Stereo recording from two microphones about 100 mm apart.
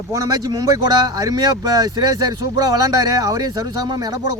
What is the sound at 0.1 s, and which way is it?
Speech, 40° right (ahead or behind).